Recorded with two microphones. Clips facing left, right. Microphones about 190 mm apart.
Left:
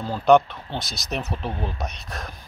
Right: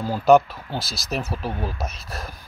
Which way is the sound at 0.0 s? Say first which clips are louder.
Right 1 dB; 5° right (ahead or behind).